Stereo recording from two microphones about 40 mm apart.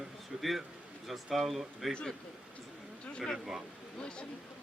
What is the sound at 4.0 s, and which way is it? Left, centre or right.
Speech, left.